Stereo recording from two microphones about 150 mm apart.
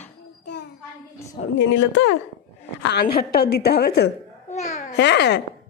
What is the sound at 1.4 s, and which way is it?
Speech, 65° left (ahead or behind).